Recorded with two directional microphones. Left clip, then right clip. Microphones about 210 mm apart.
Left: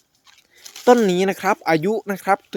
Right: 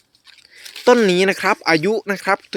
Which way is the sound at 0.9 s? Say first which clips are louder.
Right 2 dB; centre (ahead or behind).